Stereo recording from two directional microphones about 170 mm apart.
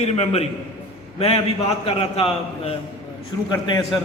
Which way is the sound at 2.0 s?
35° left (ahead or behind).